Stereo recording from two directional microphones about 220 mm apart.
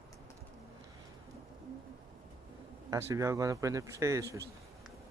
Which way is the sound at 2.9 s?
15° right (ahead or behind).